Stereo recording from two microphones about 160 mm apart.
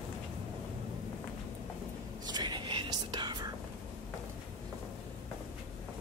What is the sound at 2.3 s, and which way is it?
Whispering, 25° right (ahead or behind).